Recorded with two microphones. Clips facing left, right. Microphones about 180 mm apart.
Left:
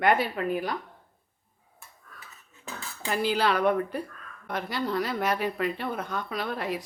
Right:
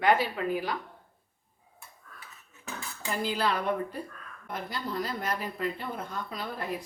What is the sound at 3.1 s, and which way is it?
Speech, 75° left (ahead or behind).